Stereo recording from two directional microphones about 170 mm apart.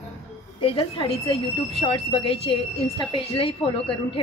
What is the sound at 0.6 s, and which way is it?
Speech, 30° left (ahead or behind).